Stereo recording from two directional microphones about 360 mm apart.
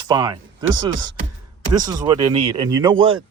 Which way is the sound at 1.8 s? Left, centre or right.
Centre.